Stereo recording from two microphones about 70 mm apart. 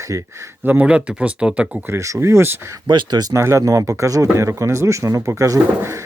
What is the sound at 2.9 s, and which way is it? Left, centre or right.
Speech, right.